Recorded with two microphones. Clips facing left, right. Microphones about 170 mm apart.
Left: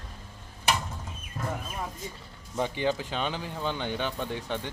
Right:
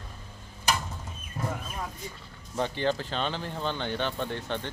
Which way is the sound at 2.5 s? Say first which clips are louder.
Even; 10° left (ahead or behind).